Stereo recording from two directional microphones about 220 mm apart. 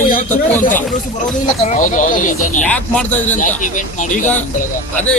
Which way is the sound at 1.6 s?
35° left (ahead or behind).